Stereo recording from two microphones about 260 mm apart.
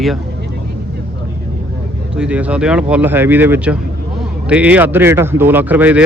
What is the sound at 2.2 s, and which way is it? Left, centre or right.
Speech, centre.